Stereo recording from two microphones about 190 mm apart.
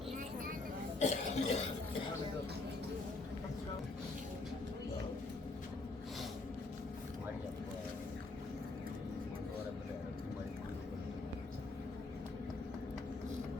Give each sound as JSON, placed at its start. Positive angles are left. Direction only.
{"t": 0.9, "sound": "cough", "side_deg": 35}